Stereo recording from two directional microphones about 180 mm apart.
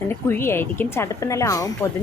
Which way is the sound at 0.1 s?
10° left (ahead or behind).